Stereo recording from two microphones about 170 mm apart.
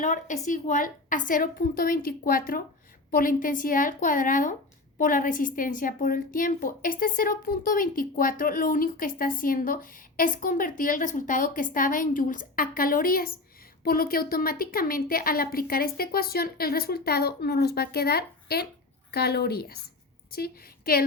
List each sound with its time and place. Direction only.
0.0 s a woman's voice: 45° left (ahead or behind)